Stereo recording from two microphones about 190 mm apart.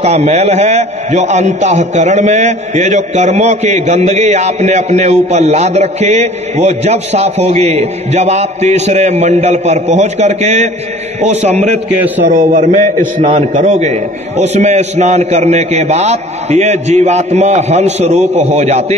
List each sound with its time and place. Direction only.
0.0 s a man's voice: 35° right (ahead or behind)